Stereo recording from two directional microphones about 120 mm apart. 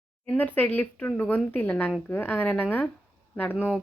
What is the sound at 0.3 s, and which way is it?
Speech, 15° left (ahead or behind).